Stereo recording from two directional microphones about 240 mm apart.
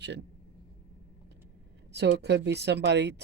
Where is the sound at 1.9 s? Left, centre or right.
Right.